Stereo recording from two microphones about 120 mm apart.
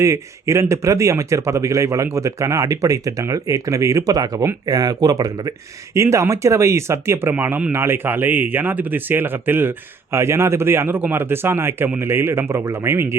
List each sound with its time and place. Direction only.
0.0 s speech: 25° right (ahead or behind)